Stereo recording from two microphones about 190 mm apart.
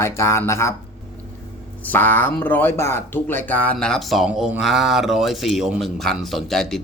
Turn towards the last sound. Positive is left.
turn(degrees=0)  # may be behind; listen again after turning